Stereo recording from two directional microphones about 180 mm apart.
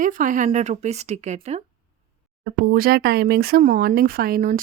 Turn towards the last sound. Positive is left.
turn(degrees=-50)  # may be behind; listen again after turning